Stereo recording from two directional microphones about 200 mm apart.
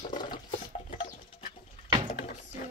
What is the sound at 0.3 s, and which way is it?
Water, 40° left (ahead or behind).